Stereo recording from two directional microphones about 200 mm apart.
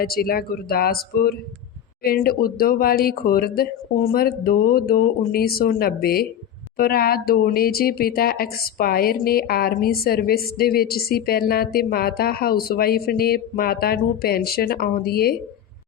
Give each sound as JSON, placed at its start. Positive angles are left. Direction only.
{"t": 0.0, "sound": "speech", "side_deg": 50}